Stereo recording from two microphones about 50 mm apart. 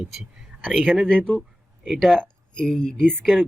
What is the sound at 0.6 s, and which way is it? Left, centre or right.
Speech, centre.